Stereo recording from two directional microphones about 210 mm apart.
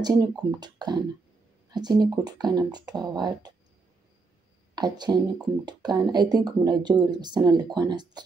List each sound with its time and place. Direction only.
0.0 s speech: 20° right (ahead or behind)
4.7 s speech: 20° right (ahead or behind)